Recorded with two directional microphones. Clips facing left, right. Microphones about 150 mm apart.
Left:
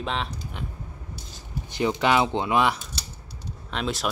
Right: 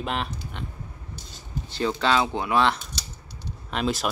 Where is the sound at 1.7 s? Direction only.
15° left (ahead or behind).